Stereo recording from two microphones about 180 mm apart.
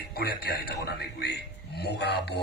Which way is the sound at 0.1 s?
60° left (ahead or behind).